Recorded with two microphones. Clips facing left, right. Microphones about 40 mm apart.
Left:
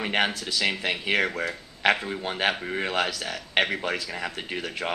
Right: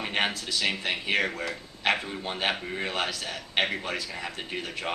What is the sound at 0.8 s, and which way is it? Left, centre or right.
A man's voice, left.